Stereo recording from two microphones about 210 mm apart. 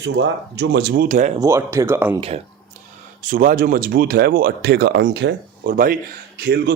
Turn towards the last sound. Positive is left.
turn(degrees=-50)  # may be behind; listen again after turning